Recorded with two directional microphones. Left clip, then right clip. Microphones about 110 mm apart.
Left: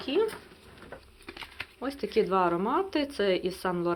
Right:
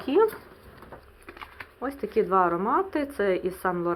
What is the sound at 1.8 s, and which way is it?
A woman's voice, 20° left (ahead or behind).